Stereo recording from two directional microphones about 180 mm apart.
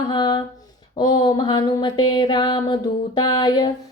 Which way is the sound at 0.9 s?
25° left (ahead or behind).